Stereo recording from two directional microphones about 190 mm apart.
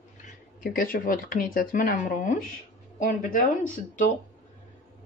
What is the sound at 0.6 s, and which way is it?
Speech, 45° left (ahead or behind).